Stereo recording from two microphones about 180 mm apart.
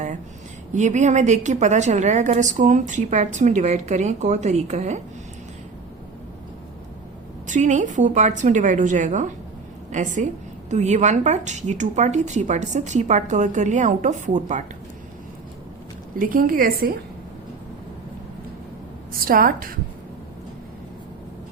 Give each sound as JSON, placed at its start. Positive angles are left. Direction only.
{"t": 0.7, "sound": "a woman's voice", "side_deg": -40}
{"t": 7.4, "sound": "a woman's voice", "side_deg": -40}
{"t": 16.1, "sound": "a woman's voice", "side_deg": -50}
{"t": 19.2, "sound": "a woman's voice", "side_deg": -55}